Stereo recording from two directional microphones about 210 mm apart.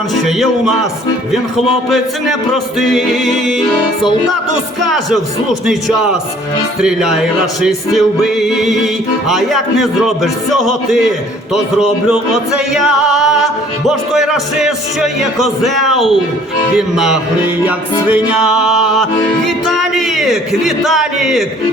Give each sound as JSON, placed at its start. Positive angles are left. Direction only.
{"t": 0.1, "sound": "yodeling", "side_deg": 0}
{"t": 6.8, "sound": "yodeling", "side_deg": -5}
{"t": 19.5, "sound": "music", "side_deg": 0}